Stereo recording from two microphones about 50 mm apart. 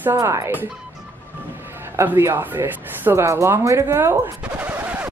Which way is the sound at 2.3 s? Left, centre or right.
Right.